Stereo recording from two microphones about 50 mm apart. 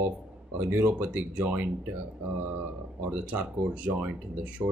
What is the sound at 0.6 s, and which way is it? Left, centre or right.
Speech, right.